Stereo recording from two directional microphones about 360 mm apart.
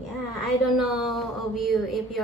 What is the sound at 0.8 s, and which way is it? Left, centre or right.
Speech, centre.